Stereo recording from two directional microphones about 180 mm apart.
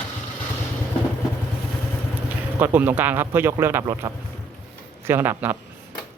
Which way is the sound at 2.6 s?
10° right (ahead or behind).